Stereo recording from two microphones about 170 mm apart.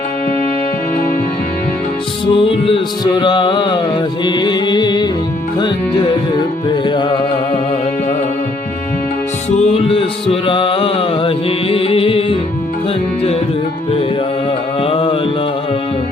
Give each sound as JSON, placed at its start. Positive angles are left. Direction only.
{"t": 2.2, "sound": "music", "side_deg": 30}
{"t": 9.5, "sound": "music", "side_deg": 40}
{"t": 14.8, "sound": "music", "side_deg": 35}